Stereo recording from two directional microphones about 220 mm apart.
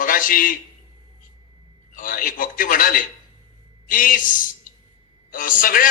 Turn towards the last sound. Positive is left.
turn(degrees=40)  # may be behind; listen again after turning